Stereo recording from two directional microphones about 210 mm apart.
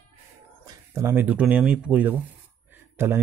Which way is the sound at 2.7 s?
10° right (ahead or behind).